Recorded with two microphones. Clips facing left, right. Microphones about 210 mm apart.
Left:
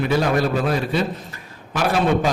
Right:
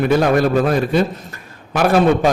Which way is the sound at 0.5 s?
50° right (ahead or behind).